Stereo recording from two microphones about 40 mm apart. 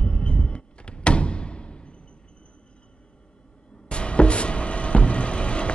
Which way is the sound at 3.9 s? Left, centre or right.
Left.